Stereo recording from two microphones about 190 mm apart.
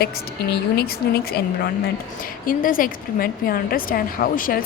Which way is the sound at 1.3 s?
55° left (ahead or behind).